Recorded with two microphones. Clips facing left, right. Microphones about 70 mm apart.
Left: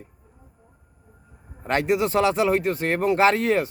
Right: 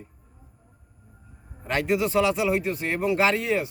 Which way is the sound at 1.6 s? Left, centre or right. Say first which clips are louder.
Left 2 dB; left.